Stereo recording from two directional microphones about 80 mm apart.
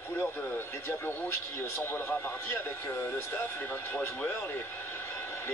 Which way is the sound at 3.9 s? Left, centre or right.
Left.